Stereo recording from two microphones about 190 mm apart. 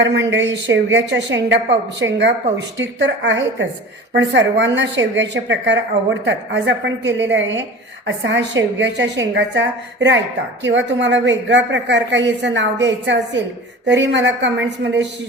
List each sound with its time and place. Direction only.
0.0 s a woman's voice: 70° right (ahead or behind)